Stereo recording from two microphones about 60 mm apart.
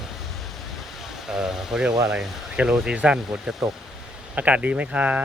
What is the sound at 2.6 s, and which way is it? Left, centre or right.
Speech, centre.